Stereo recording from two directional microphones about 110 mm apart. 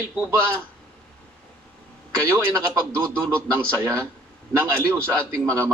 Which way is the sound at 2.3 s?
25° right (ahead or behind).